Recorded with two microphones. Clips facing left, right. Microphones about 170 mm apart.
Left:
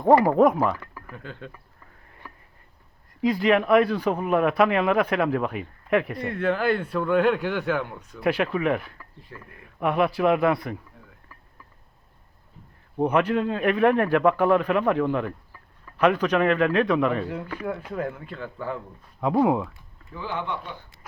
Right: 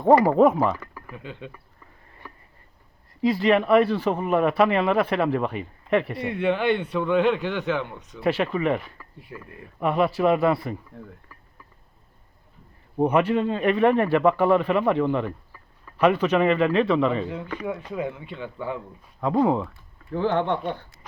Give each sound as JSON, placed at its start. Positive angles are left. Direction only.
{"t": 0.0, "sound": "a man's voice", "side_deg": 0}
{"t": 3.2, "sound": "a man's voice", "side_deg": 0}
{"t": 9.3, "sound": "speech", "side_deg": -20}
{"t": 9.8, "sound": "a man's voice", "side_deg": 0}
{"t": 13.0, "sound": "a man's voice", "side_deg": -5}
{"t": 19.2, "sound": "speech", "side_deg": 10}
{"t": 20.1, "sound": "speech", "side_deg": -60}